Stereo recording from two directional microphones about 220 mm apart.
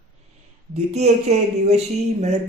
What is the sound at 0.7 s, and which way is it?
Speech, 30° right (ahead or behind).